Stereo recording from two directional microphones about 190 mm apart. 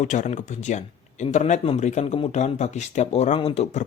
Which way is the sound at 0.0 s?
40° left (ahead or behind).